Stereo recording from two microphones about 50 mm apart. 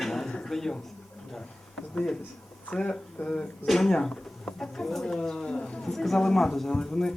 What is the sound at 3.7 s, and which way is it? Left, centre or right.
Speech, centre.